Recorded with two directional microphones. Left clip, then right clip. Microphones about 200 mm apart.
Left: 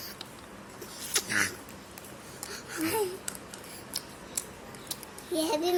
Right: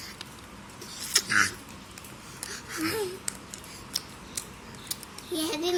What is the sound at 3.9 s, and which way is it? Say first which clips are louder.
Scissors: right 5 dB; 20° right (ahead or behind).